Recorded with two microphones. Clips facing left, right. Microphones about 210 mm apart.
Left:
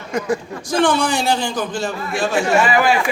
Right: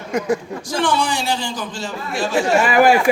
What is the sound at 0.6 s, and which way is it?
Speech, 50° left (ahead or behind).